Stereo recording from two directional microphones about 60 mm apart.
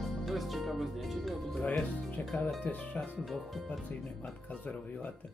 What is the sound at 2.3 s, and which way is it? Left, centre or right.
Speech, centre.